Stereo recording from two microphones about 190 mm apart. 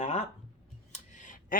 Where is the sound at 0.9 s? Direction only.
40° left (ahead or behind).